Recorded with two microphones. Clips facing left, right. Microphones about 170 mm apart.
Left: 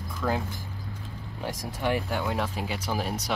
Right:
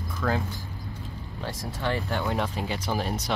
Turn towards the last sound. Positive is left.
turn(degrees=5)  # may be behind; listen again after turning